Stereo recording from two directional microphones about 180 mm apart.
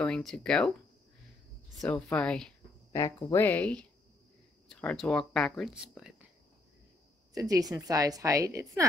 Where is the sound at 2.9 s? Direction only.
20° left (ahead or behind); by 6.1 s 5° right (ahead or behind).